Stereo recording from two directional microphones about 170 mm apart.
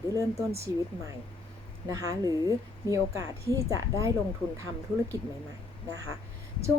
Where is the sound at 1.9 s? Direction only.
20° right (ahead or behind).